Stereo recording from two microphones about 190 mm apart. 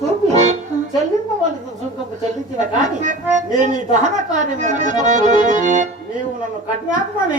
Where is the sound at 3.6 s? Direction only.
40° right (ahead or behind).